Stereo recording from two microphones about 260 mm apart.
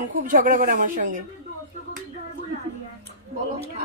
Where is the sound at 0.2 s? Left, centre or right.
Right.